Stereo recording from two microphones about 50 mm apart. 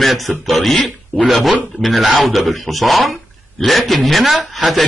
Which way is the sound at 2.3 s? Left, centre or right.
Centre.